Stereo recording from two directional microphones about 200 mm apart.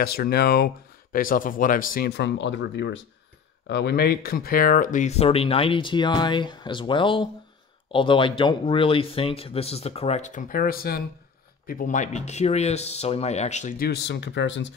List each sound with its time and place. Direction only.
0.0 s speech: 50° left (ahead or behind)